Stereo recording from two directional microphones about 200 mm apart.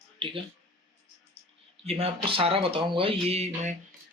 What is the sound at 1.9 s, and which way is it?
Speech, 30° right (ahead or behind).